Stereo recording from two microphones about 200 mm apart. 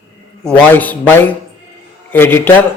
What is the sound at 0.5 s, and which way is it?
A man's voice, 10° left (ahead or behind).